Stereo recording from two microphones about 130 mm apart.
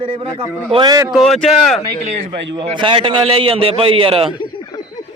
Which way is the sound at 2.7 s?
40° right (ahead or behind).